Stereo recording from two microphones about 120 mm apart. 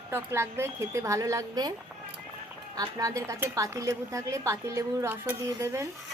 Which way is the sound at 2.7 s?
30° right (ahead or behind).